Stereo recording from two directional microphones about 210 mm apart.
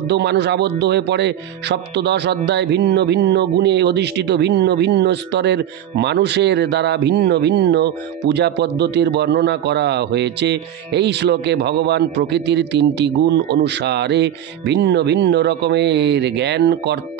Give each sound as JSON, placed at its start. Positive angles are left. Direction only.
{"t": 0.1, "sound": "speech", "side_deg": -55}